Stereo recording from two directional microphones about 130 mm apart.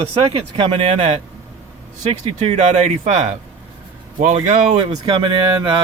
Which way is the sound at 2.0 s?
55° right (ahead or behind).